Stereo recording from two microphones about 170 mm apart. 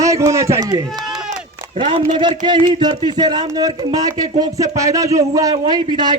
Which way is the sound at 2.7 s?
30° right (ahead or behind).